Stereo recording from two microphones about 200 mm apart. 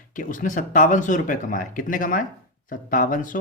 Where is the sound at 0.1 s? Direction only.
40° left (ahead or behind).